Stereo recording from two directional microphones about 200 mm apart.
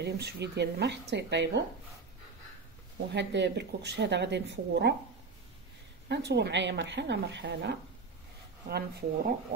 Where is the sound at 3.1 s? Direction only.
60° right (ahead or behind).